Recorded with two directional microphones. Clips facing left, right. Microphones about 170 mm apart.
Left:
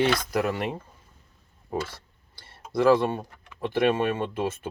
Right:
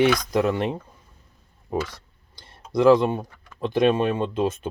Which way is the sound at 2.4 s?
20° right (ahead or behind).